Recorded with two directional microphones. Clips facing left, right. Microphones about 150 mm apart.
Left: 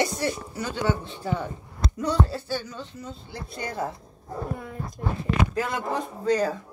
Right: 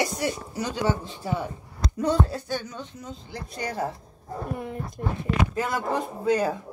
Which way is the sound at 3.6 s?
40° right (ahead or behind).